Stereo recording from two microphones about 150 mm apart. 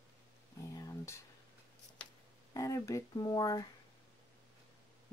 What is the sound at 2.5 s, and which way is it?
Speech, 20° left (ahead or behind).